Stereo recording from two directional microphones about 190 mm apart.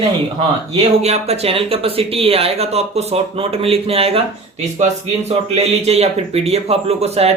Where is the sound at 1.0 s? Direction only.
35° right (ahead or behind).